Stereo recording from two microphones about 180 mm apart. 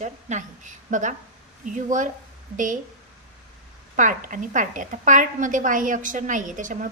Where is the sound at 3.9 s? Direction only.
45° right (ahead or behind).